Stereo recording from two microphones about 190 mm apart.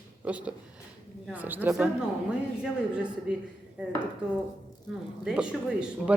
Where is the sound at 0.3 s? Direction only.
5° right (ahead or behind).